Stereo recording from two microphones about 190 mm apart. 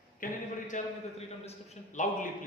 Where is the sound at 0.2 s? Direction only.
45° left (ahead or behind).